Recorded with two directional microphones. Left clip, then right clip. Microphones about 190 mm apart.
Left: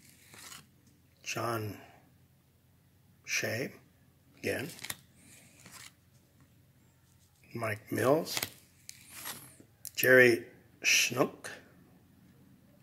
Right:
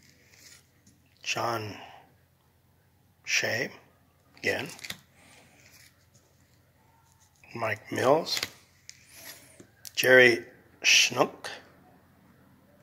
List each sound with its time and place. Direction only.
1.2 s speech: 35° left (ahead or behind)
3.3 s speech: 35° left (ahead or behind)
7.5 s speech: 35° left (ahead or behind)
8.9 s a sound: 30° left (ahead or behind)
9.8 s speech: 35° left (ahead or behind)